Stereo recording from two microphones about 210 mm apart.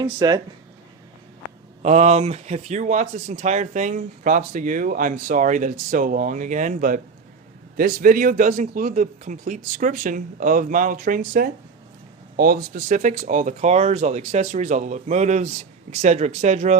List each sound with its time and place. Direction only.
0.0 s speech: 20° right (ahead or behind)
1.8 s speech: 30° right (ahead or behind)